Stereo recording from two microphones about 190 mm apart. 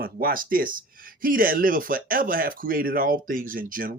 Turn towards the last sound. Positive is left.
turn(degrees=-50)  # may be behind; listen again after turning